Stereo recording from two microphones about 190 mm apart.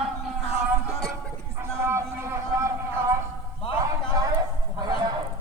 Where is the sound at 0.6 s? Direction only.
5° right (ahead or behind).